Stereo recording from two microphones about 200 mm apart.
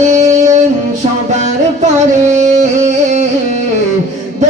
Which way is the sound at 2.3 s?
35° right (ahead or behind).